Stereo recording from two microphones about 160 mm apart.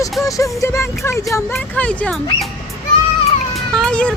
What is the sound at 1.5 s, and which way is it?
Speech, 5° left (ahead or behind).